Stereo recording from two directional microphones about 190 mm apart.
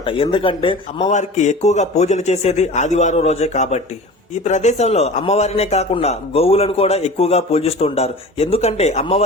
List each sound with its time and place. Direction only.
0.0 s a man's voice: 25° left (ahead or behind)